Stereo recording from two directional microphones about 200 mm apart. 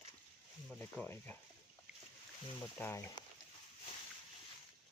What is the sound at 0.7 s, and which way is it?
Speech, 5° left (ahead or behind).